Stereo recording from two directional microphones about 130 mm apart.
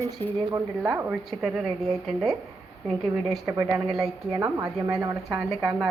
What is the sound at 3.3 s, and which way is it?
Speech, centre (ahead or behind).